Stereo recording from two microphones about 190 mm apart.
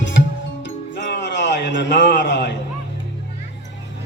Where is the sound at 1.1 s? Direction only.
70° left (ahead or behind).